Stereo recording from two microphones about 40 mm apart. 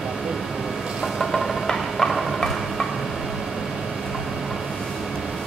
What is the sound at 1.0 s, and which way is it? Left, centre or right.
Music, centre.